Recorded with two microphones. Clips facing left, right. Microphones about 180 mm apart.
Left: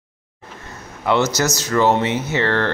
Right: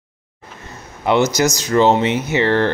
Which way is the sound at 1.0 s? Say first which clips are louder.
Right 3 dB; 15° right (ahead or behind).